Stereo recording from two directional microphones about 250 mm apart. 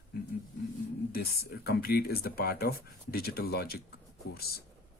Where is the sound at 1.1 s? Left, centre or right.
Left.